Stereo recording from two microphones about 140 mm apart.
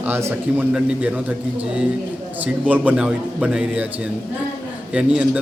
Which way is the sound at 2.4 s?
10° right (ahead or behind).